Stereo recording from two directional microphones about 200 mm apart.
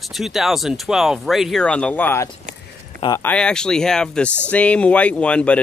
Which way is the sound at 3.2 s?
5° left (ahead or behind).